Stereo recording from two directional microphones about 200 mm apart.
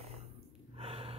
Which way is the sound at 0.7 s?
30° right (ahead or behind).